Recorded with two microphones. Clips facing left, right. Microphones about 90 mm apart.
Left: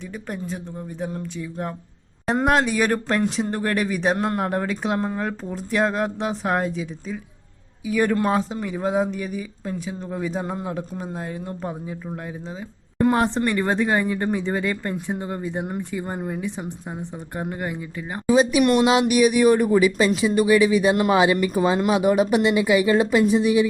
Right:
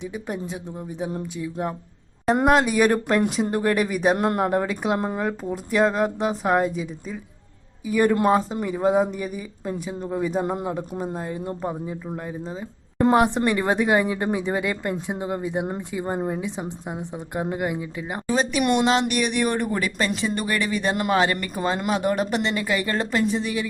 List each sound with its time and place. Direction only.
0.1 s speech: 10° right (ahead or behind)
5.7 s speech: centre (ahead or behind)
13.0 s speech: 20° right (ahead or behind)
18.3 s speech: 5° left (ahead or behind)